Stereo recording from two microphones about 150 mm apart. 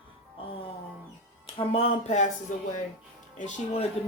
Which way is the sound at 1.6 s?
40° left (ahead or behind).